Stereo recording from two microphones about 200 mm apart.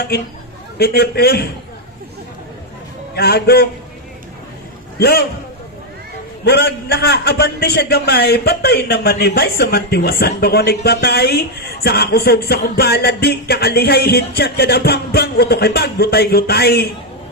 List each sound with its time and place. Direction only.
0.8 s a man's voice: 55° left (ahead or behind)
3.2 s a man's voice: 55° left (ahead or behind)
4.9 s a man's voice: 55° left (ahead or behind)
6.4 s a man's voice: 55° left (ahead or behind)